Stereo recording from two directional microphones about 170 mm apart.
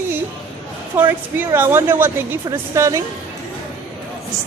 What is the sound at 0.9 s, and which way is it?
A woman's voice, 15° right (ahead or behind).